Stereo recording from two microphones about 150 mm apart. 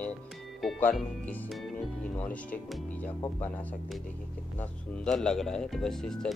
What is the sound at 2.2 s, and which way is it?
Speech, 10° left (ahead or behind).